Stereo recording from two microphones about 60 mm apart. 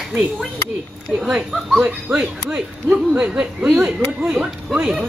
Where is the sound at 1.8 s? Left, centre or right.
Right.